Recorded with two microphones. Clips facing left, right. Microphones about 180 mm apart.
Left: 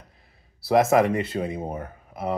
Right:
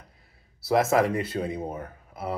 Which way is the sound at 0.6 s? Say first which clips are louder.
Left 3 dB; 25° left (ahead or behind).